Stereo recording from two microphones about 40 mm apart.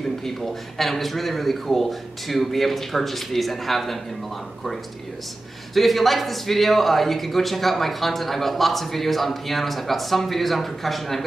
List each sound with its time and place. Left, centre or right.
0.7 s a man's voice: centre
5.8 s a man's voice: centre